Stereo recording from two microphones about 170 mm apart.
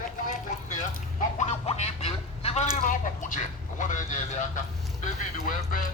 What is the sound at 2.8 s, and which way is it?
A man's voice, 50° left (ahead or behind).